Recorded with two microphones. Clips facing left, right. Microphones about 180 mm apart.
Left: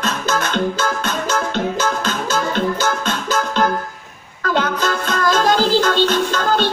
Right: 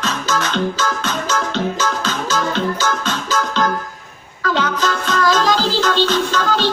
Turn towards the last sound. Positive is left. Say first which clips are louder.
# even
turn(degrees=50)  # may be behind; listen again after turning